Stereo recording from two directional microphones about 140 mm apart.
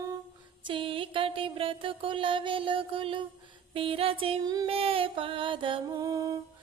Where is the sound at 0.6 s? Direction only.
35° right (ahead or behind).